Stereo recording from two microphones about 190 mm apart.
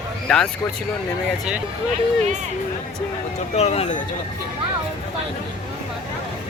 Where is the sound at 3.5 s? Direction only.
35° left (ahead or behind).